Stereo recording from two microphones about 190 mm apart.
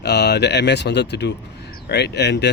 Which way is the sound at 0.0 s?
60° left (ahead or behind).